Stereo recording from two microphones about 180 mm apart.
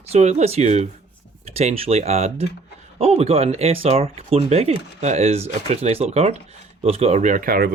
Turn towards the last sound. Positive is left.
turn(degrees=-55)  # may be behind; listen again after turning